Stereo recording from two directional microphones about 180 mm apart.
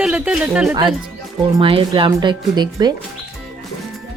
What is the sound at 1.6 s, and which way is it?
Speech, 30° right (ahead or behind).